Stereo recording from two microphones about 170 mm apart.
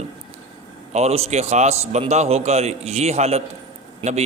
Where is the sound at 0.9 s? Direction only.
35° right (ahead or behind).